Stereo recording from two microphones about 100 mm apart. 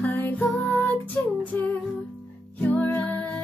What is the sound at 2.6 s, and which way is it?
Music, 15° left (ahead or behind).